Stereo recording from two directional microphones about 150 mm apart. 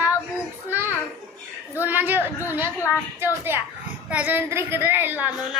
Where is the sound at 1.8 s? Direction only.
10° right (ahead or behind).